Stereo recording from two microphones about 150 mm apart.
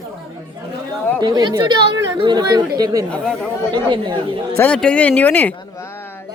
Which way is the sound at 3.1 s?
5° left (ahead or behind).